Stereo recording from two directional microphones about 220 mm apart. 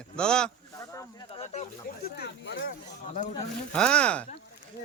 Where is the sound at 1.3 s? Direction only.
30° left (ahead or behind).